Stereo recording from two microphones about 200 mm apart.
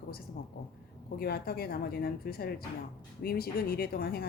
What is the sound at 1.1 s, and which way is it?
Speech, 50° left (ahead or behind).